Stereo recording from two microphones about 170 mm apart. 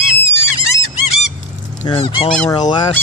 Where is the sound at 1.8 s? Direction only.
30° left (ahead or behind).